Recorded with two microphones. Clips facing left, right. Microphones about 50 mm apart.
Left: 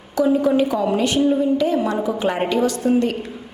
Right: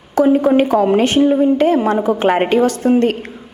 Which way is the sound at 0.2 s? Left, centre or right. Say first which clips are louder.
Right 5 dB; right.